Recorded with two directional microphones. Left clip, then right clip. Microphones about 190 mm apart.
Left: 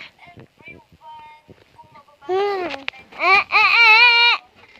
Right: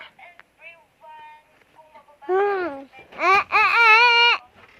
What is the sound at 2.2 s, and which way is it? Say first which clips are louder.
Speech: even; 35° right (ahead or behind).